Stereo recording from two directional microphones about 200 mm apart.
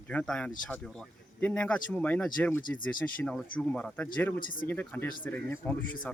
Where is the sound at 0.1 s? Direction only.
5° left (ahead or behind).